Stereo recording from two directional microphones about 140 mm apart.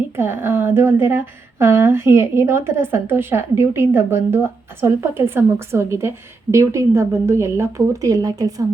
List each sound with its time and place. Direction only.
0.2 s a woman's voice: 15° right (ahead or behind)